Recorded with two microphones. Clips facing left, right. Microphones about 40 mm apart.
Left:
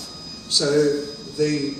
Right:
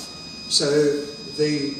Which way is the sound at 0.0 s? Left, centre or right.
Right.